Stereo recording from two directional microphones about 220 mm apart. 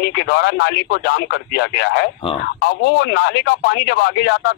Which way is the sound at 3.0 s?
50° left (ahead or behind).